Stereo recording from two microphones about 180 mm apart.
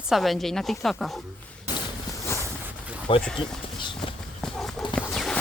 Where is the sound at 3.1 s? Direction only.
30° left (ahead or behind).